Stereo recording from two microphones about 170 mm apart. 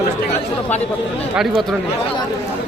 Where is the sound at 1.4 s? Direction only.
Centre (ahead or behind).